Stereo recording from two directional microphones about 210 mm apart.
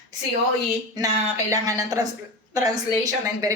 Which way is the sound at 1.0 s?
15° right (ahead or behind).